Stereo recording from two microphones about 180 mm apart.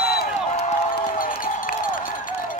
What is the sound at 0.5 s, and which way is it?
Crowd, 35° left (ahead or behind).